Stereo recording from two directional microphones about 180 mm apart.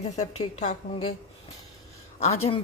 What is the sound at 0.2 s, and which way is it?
Speech, 40° left (ahead or behind).